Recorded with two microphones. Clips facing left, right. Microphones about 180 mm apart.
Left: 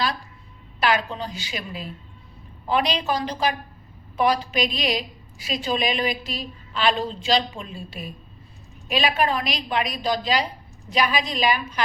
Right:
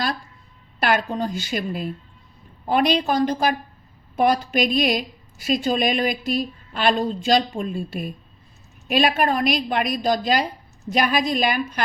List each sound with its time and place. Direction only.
0.8 s a woman's voice: 50° right (ahead or behind)